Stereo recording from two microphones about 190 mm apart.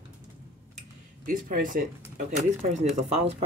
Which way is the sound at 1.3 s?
45° right (ahead or behind).